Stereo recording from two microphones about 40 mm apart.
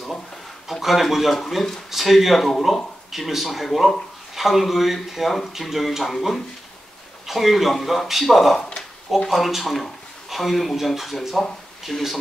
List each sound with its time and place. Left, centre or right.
0.7 s speech: centre
1.9 s speech: centre
8.5 s a sound: centre
9.3 s speech: centre
11.9 s speech: centre